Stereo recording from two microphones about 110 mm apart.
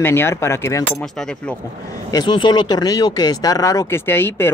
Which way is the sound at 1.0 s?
10° left (ahead or behind).